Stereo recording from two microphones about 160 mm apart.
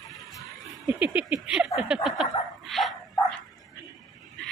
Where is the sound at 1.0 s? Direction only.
10° right (ahead or behind).